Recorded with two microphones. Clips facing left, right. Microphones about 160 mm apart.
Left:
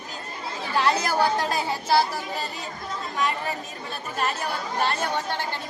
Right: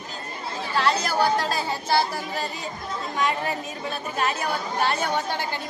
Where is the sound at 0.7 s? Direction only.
20° left (ahead or behind).